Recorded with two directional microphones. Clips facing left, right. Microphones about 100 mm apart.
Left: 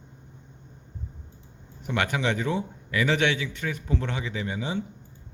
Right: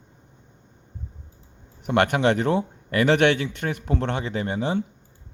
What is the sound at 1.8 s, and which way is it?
A man's voice, 60° right (ahead or behind).